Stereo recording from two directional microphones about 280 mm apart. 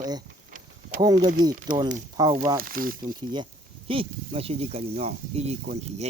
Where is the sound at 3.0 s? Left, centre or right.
Centre.